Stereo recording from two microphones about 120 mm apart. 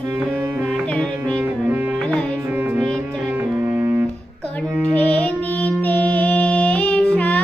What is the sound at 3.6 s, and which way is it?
Music, 20° right (ahead or behind).